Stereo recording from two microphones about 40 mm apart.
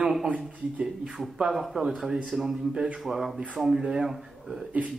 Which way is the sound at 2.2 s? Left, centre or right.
Centre.